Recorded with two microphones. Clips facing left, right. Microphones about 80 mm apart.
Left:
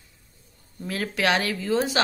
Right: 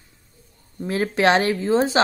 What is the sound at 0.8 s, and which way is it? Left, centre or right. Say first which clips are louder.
A woman's voice: right 6 dB; right.